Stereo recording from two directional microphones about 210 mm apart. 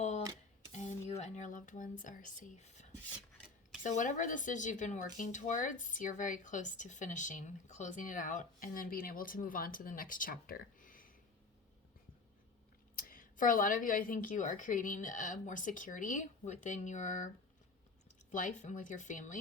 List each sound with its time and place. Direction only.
0.7 s a sound: 30° left (ahead or behind)
3.8 s speech: 35° left (ahead or behind)
13.0 s speech: 40° left (ahead or behind)
18.3 s speech: 40° left (ahead or behind)